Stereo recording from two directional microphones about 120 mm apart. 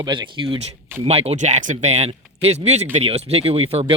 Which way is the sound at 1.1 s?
60° right (ahead or behind).